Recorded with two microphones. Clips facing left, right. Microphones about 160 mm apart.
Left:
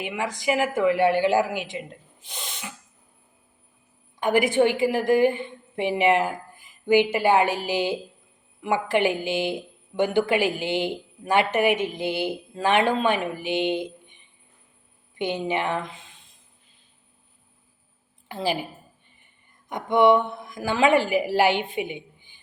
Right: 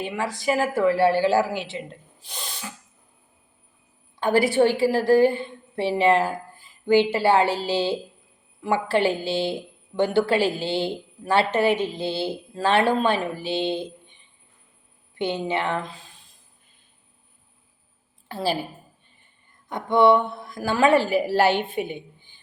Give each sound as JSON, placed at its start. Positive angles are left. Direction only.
{"t": 0.2, "sound": "a woman's voice", "side_deg": 20}
{"t": 4.2, "sound": "a woman's voice", "side_deg": 20}
{"t": 18.3, "sound": "a woman's voice", "side_deg": 15}